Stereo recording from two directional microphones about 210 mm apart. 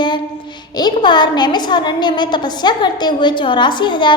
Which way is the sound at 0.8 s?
20° left (ahead or behind).